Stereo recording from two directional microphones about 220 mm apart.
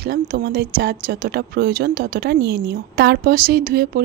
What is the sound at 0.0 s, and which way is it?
Speech, 45° right (ahead or behind).